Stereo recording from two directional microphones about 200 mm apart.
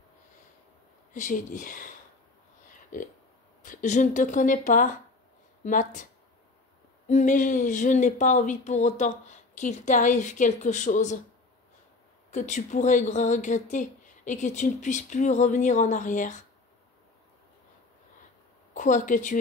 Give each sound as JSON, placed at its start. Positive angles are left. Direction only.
{"t": 1.1, "sound": "speech", "side_deg": 40}
{"t": 3.6, "sound": "speech", "side_deg": 40}
{"t": 7.1, "sound": "speech", "side_deg": 35}
{"t": 12.3, "sound": "speech", "side_deg": 35}
{"t": 18.7, "sound": "speech", "side_deg": 40}